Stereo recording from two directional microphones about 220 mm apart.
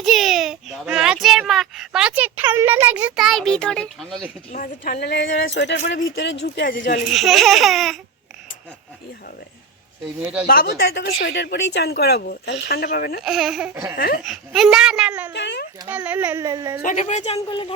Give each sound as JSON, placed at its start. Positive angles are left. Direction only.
{"t": 0.0, "sound": "a sound", "side_deg": 0}
{"t": 4.5, "sound": "speech", "side_deg": 40}
{"t": 6.7, "sound": "a woman's voice", "side_deg": 40}
{"t": 7.1, "sound": "a child's voice", "side_deg": 0}
{"t": 10.4, "sound": "speech", "side_deg": 40}
{"t": 13.2, "sound": "a child's voice", "side_deg": 0}
{"t": 13.9, "sound": "a woman's voice", "side_deg": 40}
{"t": 14.3, "sound": "a child's voice", "side_deg": 0}
{"t": 15.3, "sound": "a child's voice", "side_deg": 55}
{"t": 15.9, "sound": "speech", "side_deg": -5}
{"t": 16.8, "sound": "a woman's voice", "side_deg": 30}